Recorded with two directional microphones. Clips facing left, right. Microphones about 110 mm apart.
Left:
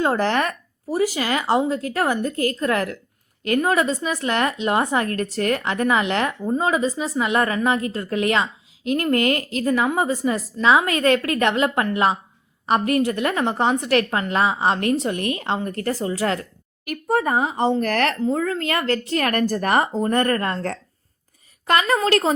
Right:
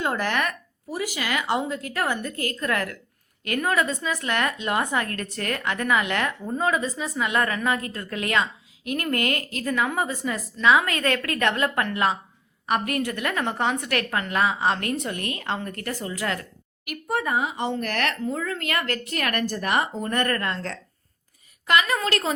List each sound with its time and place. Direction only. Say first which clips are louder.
0.0 s a woman's voice: left 5 dB; 30° left (ahead or behind)
21.7 s speech: left 4 dB; 35° left (ahead or behind)